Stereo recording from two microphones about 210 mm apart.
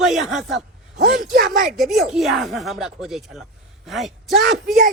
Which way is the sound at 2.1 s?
Centre (ahead or behind).